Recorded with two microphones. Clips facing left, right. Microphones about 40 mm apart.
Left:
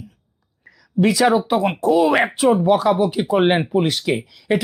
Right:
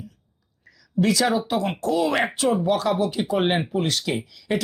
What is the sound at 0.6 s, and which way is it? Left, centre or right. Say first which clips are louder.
Speech: left 4 dB; left.